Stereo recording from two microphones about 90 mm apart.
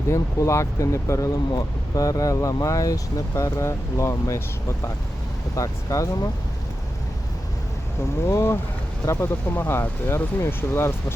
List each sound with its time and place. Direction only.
0.1 s speech: 35° left (ahead or behind)
8.3 s speech: 30° left (ahead or behind)